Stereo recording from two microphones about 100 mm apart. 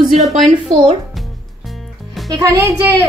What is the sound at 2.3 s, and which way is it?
Speech, 35° right (ahead or behind).